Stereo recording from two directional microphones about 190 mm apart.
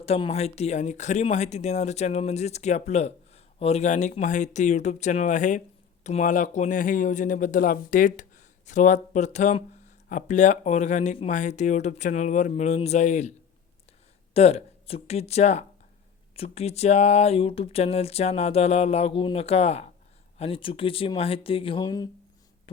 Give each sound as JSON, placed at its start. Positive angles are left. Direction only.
{"t": 0.0, "sound": "speech", "side_deg": 30}
{"t": 14.3, "sound": "speech", "side_deg": 30}